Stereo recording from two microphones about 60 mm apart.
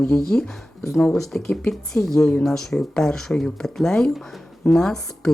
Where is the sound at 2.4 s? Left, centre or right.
Centre.